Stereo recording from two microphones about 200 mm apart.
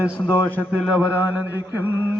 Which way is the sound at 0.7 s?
5° right (ahead or behind).